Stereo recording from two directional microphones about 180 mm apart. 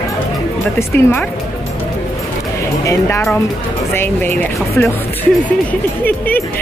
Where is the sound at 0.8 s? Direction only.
10° left (ahead or behind).